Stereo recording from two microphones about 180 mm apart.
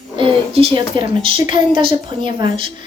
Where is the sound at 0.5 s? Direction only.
30° right (ahead or behind).